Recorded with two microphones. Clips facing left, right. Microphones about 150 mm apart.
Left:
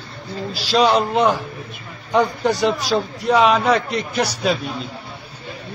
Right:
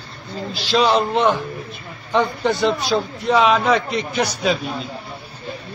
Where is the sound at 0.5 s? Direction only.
5° left (ahead or behind).